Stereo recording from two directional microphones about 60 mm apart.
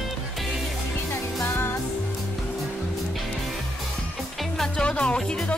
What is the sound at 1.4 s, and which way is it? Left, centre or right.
Music, left.